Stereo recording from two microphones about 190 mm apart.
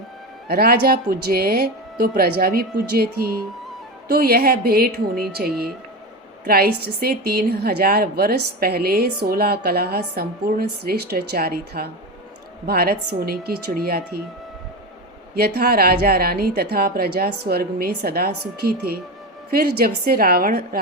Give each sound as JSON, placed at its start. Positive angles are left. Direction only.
{"t": 0.4, "sound": "a woman's voice", "side_deg": -55}
{"t": 6.4, "sound": "a woman's voice", "side_deg": -50}
{"t": 15.4, "sound": "a woman's voice", "side_deg": -55}
{"t": 19.5, "sound": "a woman's voice", "side_deg": -55}